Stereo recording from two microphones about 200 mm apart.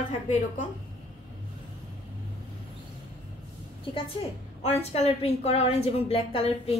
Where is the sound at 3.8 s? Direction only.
30° left (ahead or behind).